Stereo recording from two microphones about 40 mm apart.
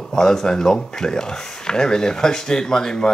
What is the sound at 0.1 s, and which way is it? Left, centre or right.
Speech, centre.